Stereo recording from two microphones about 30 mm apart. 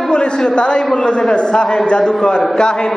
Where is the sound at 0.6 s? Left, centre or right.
Left.